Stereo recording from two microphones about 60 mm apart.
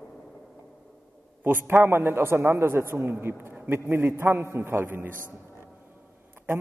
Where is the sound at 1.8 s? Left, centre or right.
Right.